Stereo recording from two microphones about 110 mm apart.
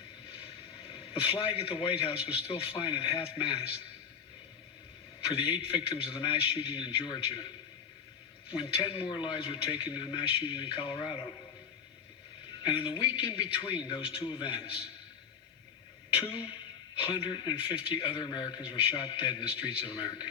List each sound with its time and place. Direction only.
1.5 s a man's voice: 55° left (ahead or behind)
5.2 s a man's voice: 55° left (ahead or behind)
8.5 s a man's voice: 50° left (ahead or behind)
12.6 s a man's voice: 50° left (ahead or behind)
17.0 s a man's voice: 45° left (ahead or behind)